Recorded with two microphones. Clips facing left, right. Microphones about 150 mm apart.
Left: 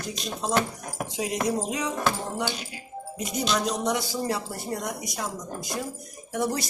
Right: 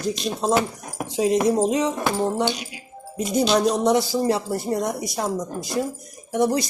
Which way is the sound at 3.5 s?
25° right (ahead or behind).